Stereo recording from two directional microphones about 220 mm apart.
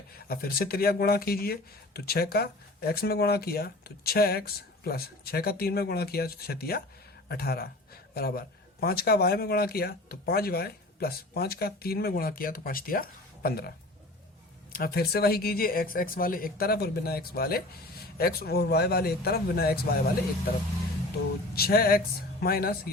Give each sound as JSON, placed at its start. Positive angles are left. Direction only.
{"t": 0.3, "sound": "speech", "side_deg": 45}
{"t": 21.5, "sound": "speech", "side_deg": 45}